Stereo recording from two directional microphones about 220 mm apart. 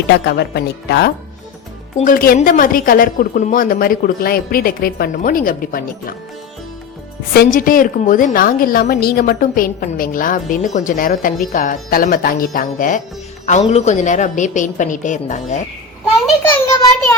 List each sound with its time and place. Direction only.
0.3 s speech: 50° left (ahead or behind)
2.0 s a woman's voice: 40° left (ahead or behind)
7.3 s a woman's voice: 40° left (ahead or behind)
16.2 s a child's voice: 10° left (ahead or behind)